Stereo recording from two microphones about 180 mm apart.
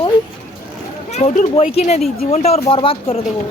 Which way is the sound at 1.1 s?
40° left (ahead or behind).